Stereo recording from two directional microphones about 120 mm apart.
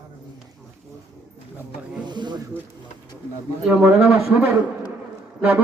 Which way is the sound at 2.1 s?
40° right (ahead or behind).